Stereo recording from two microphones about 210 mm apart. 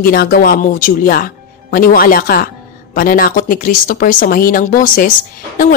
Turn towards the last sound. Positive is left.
turn(degrees=40)  # may be behind; listen again after turning